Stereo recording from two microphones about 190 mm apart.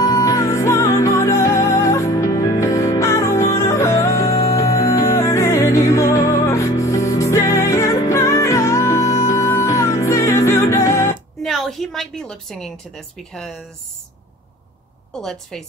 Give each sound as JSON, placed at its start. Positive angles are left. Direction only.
{"t": 0.0, "sound": "music", "side_deg": 15}
{"t": 11.4, "sound": "a sound", "side_deg": 0}
{"t": 15.1, "sound": "a woman's voice", "side_deg": 0}